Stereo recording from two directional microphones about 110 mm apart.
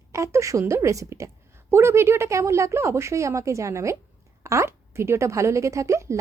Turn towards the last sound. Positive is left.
turn(degrees=-25)  # may be behind; listen again after turning